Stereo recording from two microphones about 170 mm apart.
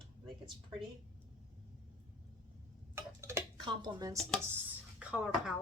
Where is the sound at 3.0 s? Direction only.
15° right (ahead or behind).